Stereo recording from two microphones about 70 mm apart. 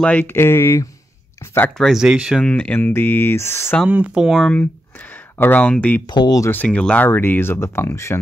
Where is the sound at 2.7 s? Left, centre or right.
Left.